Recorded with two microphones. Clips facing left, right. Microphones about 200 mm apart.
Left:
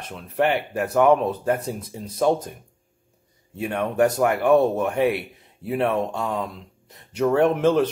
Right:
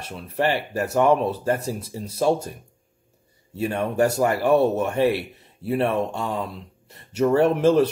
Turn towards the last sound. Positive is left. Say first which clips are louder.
# right 1 dB
turn(degrees=-5)  # may be behind; listen again after turning